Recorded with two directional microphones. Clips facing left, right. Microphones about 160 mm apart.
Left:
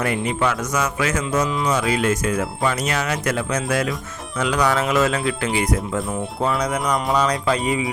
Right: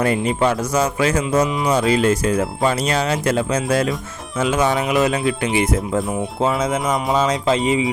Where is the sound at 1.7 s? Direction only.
30° right (ahead or behind).